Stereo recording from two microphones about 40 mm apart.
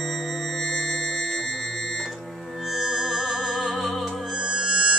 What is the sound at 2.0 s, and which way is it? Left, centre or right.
Music, centre.